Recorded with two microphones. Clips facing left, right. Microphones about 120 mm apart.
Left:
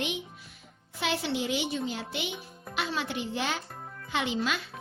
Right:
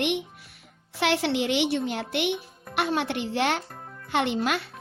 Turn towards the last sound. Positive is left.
turn(degrees=-60)  # may be behind; listen again after turning